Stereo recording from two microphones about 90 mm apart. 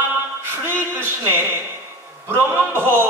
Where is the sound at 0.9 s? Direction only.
25° right (ahead or behind).